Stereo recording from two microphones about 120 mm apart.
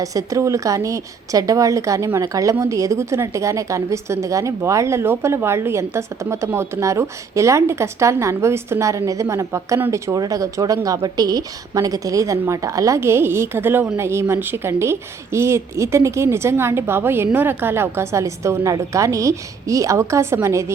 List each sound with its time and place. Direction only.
0.0 s a woman's voice: 30° right (ahead or behind)